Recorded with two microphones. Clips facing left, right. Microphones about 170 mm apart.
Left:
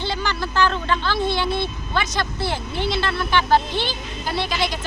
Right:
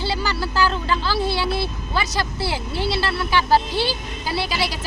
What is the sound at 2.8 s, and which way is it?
Speech, 35° right (ahead or behind).